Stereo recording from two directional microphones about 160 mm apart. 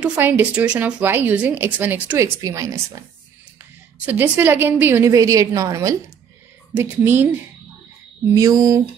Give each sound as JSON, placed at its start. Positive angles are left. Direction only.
{"t": 0.0, "sound": "speech", "side_deg": -10}
{"t": 4.0, "sound": "speech", "side_deg": -10}
{"t": 8.4, "sound": "a sound", "side_deg": -20}